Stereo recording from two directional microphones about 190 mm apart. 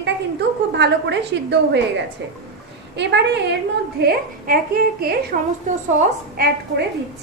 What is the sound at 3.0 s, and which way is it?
Speech, 65° right (ahead or behind).